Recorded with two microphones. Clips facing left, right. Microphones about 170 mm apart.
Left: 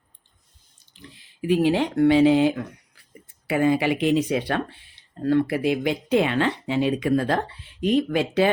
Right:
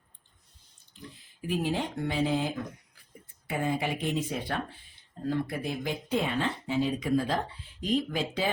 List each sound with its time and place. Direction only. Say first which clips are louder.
1.1 s speech: left 10 dB; 80° left
3.4 s speech: left 10 dB; 90° left; by 8.4 s 70° left (ahead or behind)